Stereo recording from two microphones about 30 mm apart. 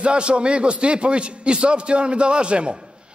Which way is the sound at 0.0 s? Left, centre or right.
Right.